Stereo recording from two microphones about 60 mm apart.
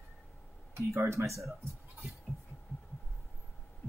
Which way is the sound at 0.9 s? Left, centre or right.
Right.